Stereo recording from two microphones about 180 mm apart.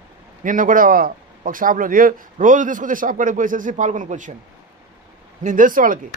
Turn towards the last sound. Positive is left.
turn(degrees=-50)  # may be behind; listen again after turning